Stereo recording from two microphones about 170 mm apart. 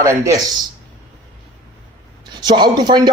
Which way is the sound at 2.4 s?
25° right (ahead or behind).